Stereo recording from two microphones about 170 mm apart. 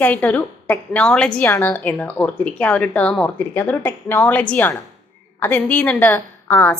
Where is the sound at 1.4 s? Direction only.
20° left (ahead or behind).